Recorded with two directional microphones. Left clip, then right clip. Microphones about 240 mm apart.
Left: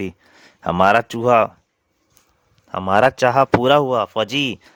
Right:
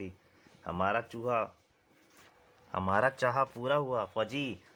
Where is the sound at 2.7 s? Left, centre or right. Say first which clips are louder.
Left 14 dB; left.